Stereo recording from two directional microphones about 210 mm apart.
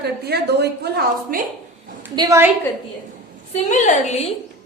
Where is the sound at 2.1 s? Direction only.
15° right (ahead or behind).